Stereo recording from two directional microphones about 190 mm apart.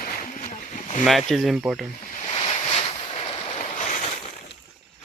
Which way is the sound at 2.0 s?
40° left (ahead or behind).